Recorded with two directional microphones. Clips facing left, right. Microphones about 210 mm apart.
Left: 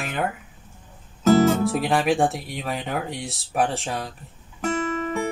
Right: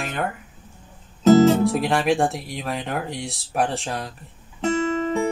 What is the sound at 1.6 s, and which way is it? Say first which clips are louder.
Speech: right 1 dB; centre (ahead or behind).